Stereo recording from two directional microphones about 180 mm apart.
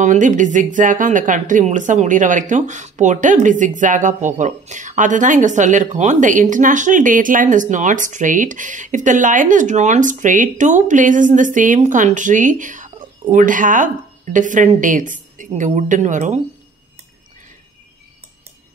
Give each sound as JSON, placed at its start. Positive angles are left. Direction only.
{"t": 0.0, "sound": "speech", "side_deg": -45}